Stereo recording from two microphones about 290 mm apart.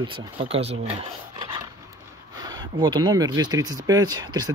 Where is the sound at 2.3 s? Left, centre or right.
Centre.